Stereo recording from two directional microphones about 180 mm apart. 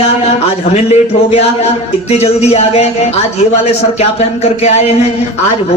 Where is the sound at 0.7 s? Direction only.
35° left (ahead or behind).